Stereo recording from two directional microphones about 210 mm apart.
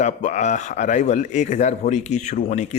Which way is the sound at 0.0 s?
35° left (ahead or behind).